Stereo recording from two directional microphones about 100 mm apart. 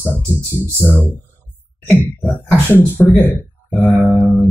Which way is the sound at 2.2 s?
20° left (ahead or behind).